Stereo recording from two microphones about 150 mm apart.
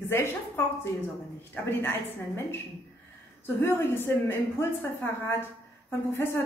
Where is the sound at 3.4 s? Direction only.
15° left (ahead or behind).